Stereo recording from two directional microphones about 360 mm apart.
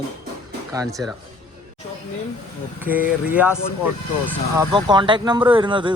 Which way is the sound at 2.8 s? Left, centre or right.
Centre.